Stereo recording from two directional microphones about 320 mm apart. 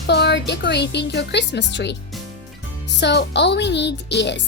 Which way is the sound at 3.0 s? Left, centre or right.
Left.